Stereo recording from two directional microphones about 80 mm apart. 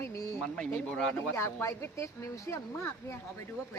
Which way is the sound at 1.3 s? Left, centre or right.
Left.